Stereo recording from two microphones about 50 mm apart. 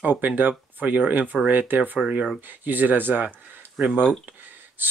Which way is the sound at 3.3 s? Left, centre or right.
Right.